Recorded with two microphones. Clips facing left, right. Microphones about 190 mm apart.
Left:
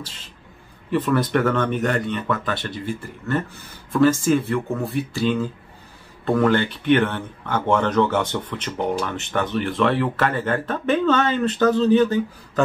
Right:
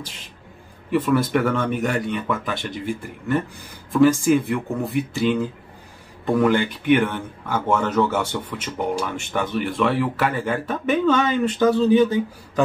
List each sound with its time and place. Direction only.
0.9 s speech: 10° right (ahead or behind)